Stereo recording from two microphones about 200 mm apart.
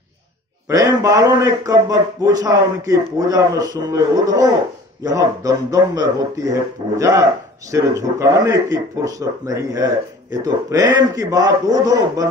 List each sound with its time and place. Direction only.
0.7 s speech: 15° right (ahead or behind)